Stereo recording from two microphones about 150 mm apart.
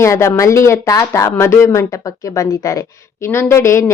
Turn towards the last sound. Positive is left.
turn(degrees=20)  # may be behind; listen again after turning